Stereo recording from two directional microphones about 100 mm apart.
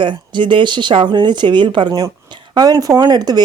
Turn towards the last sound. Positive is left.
turn(degrees=-40)  # may be behind; listen again after turning